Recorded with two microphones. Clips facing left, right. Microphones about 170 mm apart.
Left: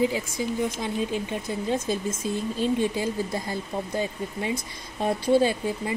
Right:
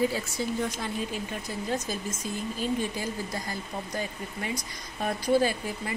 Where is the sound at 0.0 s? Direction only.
15° left (ahead or behind).